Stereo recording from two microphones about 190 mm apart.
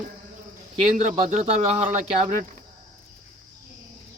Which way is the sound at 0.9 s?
35° right (ahead or behind).